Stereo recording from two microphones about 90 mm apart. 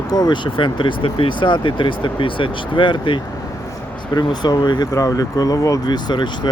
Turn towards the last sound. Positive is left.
turn(degrees=55)  # may be behind; listen again after turning